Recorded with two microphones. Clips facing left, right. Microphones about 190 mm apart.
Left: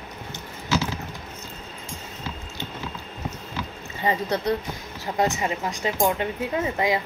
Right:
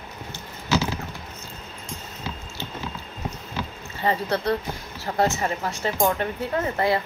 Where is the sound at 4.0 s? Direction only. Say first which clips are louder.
Even; 15° left (ahead or behind).